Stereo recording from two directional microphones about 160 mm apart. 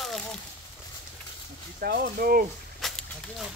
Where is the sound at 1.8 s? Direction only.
70° right (ahead or behind).